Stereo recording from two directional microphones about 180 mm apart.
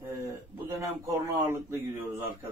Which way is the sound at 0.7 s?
15° right (ahead or behind).